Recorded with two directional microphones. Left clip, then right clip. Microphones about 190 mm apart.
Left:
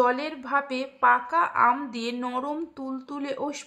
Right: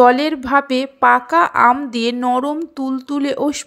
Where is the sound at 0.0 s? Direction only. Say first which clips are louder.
Right 12 dB; 35° right (ahead or behind).